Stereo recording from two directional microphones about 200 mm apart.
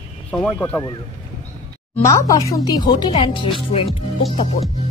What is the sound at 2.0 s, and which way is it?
Speech, 15° left (ahead or behind).